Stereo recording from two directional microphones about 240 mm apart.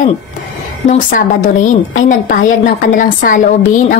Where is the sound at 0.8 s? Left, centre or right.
Left.